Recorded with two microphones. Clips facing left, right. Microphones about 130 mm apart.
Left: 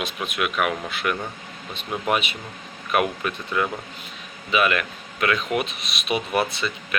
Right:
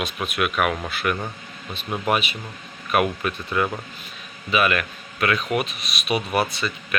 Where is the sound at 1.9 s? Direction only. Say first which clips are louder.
Right 1 dB; 10° right (ahead or behind).